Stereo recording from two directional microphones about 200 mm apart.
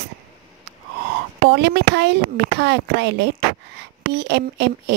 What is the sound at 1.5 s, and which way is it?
Speech, 55° right (ahead or behind).